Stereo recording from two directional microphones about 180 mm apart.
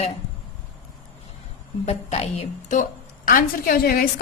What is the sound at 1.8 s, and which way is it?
A woman's voice, 35° left (ahead or behind).